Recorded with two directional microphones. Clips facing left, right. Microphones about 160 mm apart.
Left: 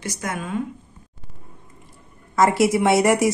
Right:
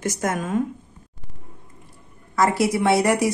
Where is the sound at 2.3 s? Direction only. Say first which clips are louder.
Left 3 dB; 20° left (ahead or behind).